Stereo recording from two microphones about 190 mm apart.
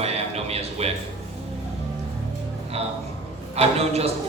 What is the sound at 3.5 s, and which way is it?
Speech, 35° right (ahead or behind).